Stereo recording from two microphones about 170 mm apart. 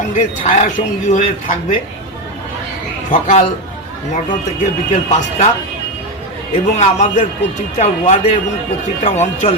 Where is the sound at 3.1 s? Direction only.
40° left (ahead or behind).